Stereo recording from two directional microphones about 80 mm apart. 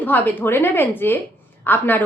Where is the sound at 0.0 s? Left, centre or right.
Left.